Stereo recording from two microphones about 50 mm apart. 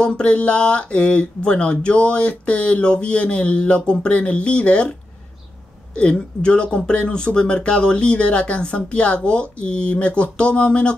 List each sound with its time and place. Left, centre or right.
0.0 s speech: left
5.9 s speech: left